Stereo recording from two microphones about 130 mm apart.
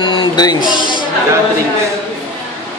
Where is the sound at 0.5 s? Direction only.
35° right (ahead or behind).